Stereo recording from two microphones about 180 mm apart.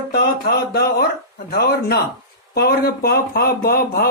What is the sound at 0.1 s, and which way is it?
Speech, 60° left (ahead or behind).